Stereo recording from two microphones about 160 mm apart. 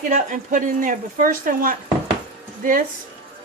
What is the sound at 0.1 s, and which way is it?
Speech, 55° right (ahead or behind).